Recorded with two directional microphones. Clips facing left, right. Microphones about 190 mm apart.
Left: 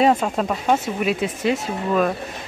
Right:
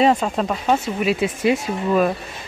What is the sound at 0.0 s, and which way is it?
Speech, 5° left (ahead or behind).